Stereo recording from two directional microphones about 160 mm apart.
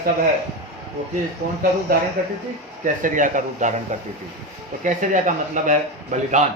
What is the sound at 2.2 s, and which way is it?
Speech, 60° right (ahead or behind).